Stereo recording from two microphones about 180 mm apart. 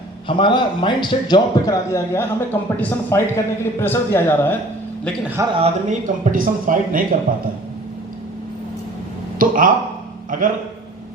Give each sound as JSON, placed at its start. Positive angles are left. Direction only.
{"t": 0.3, "sound": "a man's voice", "side_deg": 25}
{"t": 5.5, "sound": "speech", "side_deg": -40}
{"t": 9.4, "sound": "speech", "side_deg": -50}